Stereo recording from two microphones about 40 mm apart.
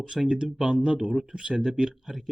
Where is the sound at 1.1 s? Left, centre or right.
Centre.